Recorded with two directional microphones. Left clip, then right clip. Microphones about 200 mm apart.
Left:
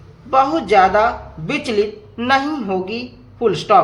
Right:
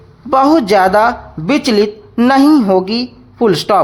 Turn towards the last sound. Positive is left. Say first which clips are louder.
# right 2 dB
turn(degrees=-50)  # may be behind; listen again after turning